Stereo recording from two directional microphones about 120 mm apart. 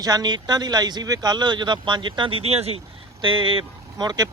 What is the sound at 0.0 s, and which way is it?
Speech, 35° right (ahead or behind).